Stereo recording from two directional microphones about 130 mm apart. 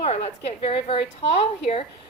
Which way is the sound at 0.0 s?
50° left (ahead or behind).